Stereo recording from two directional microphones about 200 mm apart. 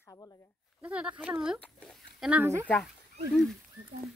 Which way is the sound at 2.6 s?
5° left (ahead or behind).